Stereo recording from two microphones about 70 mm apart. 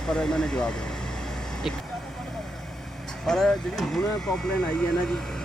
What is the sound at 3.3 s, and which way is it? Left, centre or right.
Speech, centre.